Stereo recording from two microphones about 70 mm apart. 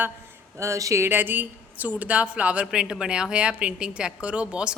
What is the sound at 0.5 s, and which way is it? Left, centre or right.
Speech, right.